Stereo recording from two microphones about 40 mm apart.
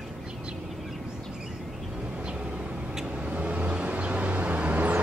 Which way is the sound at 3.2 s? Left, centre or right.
Right.